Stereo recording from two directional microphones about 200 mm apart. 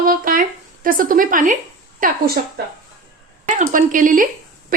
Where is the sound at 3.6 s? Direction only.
40° right (ahead or behind).